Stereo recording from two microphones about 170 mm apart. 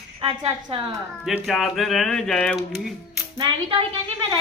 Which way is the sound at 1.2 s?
Centre (ahead or behind).